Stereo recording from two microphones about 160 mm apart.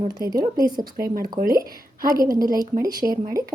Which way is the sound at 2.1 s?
65° right (ahead or behind).